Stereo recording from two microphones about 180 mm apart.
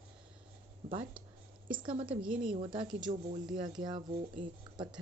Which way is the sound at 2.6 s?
25° right (ahead or behind).